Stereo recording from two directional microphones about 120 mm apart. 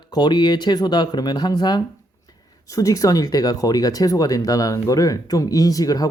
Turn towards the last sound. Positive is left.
turn(degrees=30)  # may be behind; listen again after turning